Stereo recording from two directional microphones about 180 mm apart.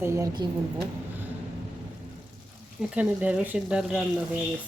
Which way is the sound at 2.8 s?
5° right (ahead or behind).